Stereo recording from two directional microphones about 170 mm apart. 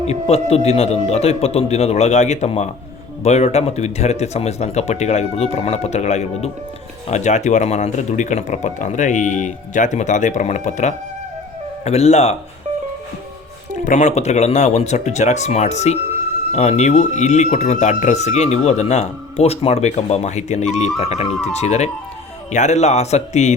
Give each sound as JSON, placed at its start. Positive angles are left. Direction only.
{"t": 0.1, "sound": "speech", "side_deg": 40}
{"t": 13.8, "sound": "speech", "side_deg": 45}